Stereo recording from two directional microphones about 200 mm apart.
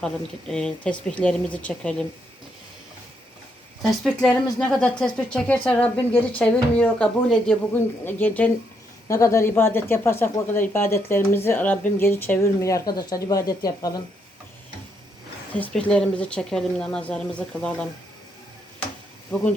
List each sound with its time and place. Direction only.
0.0 s speech: 5° left (ahead or behind)
3.8 s a woman's voice: centre (ahead or behind); by 14.0 s 20° left (ahead or behind)
15.5 s speech: 5° left (ahead or behind)
19.3 s a woman's voice: 10° left (ahead or behind)